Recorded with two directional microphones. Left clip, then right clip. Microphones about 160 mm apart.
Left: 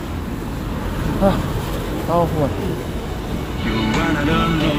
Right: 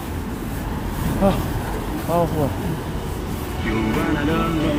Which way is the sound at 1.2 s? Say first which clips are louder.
Left 2 dB; 20° right (ahead or behind).